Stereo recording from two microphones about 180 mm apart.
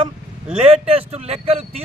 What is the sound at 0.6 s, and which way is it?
Speech, 35° right (ahead or behind).